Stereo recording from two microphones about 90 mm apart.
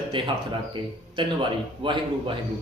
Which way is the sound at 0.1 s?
65° right (ahead or behind).